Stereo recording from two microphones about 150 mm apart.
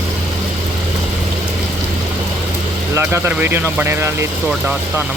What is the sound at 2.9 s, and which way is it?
Speech, 15° right (ahead or behind).